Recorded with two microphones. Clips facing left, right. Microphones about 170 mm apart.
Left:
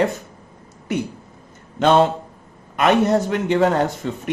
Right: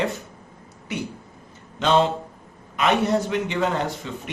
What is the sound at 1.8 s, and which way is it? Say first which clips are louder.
Speech: left 4 dB; 50° left (ahead or behind).